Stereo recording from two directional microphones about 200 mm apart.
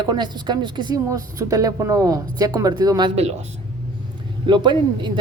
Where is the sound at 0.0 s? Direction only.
20° right (ahead or behind).